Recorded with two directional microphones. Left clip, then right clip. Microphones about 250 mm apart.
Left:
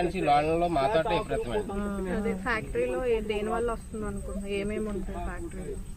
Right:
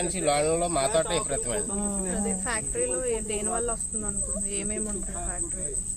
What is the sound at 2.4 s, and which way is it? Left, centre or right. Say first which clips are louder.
Speech: left 2 dB; left.